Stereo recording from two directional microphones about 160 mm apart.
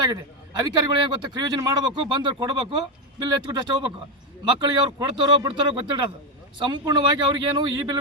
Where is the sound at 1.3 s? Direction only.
25° right (ahead or behind).